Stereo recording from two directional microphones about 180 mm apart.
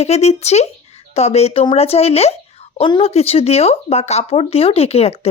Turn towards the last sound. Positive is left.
turn(degrees=35)  # may be behind; listen again after turning